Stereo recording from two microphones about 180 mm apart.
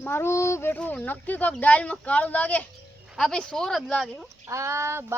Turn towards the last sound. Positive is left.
turn(degrees=-15)  # may be behind; listen again after turning